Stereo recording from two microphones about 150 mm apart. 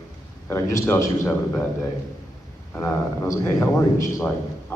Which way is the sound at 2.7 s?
20° left (ahead or behind).